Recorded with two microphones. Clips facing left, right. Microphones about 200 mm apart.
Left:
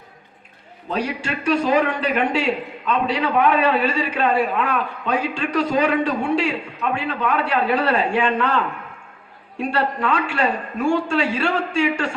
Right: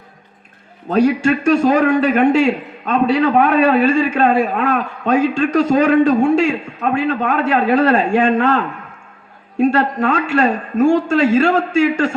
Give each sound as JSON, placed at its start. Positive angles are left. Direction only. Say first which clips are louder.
{"t": 0.9, "sound": "a man's voice", "louder": "right 11 dB", "side_deg": -45}